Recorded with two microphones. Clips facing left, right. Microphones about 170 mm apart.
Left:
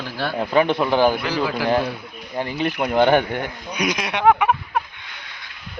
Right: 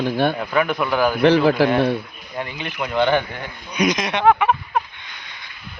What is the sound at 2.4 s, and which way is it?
Speech, 35° left (ahead or behind).